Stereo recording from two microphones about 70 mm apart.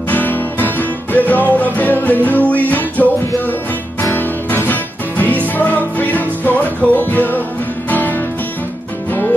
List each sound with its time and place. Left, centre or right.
0.1 s music: left